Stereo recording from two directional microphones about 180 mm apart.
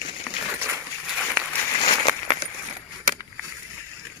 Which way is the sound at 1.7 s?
25° left (ahead or behind).